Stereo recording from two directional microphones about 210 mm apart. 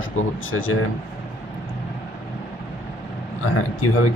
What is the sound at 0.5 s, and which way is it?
Speech, 75° left (ahead or behind).